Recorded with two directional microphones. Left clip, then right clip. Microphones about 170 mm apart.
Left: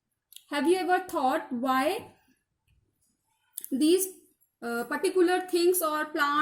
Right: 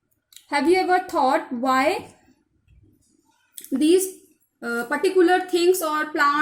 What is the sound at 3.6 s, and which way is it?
A woman's voice, 65° left (ahead or behind).